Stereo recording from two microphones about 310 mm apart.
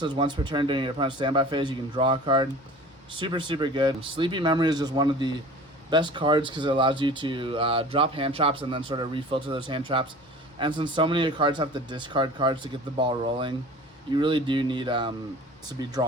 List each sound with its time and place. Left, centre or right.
0.0 s speech: centre